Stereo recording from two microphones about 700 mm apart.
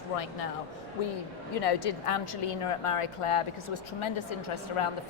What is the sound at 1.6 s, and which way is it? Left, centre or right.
Speech, left.